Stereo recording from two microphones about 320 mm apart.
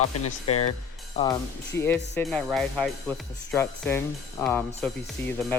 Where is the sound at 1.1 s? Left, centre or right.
Centre.